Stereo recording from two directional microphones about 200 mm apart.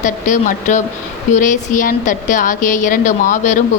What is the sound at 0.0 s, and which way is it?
A woman's voice, 40° left (ahead or behind).